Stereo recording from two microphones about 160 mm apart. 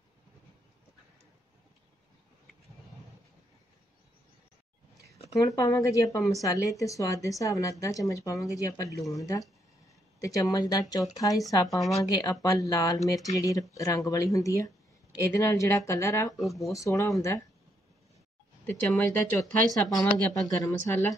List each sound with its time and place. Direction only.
5.3 s a woman's voice: 20° left (ahead or behind)
16.3 s speech: centre (ahead or behind)
16.7 s a woman's voice: 20° left (ahead or behind)
18.7 s speech: 10° left (ahead or behind)
19.9 s a woman's voice: 25° left (ahead or behind)